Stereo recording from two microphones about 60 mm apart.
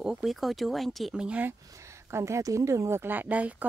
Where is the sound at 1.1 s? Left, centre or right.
Centre.